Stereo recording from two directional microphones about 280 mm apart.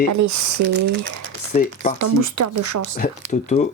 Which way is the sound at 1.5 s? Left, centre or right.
Left.